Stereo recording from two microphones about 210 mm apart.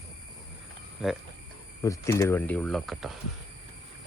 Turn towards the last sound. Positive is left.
turn(degrees=0)  # may be behind; listen again after turning